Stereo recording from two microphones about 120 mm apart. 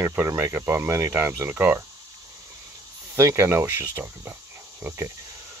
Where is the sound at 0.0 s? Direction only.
20° right (ahead or behind).